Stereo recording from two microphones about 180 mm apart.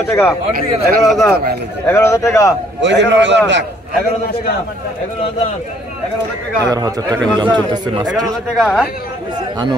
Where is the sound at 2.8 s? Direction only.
80° right.